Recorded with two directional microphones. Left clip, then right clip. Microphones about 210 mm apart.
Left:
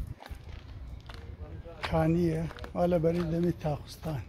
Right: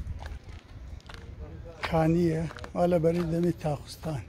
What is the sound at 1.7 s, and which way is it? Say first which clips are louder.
Speech: right 3 dB; 10° right (ahead or behind).